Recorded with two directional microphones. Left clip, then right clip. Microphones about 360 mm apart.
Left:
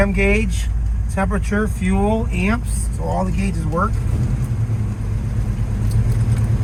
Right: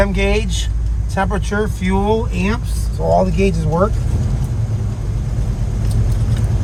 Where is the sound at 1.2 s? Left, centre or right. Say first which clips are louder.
Right 3 dB; right.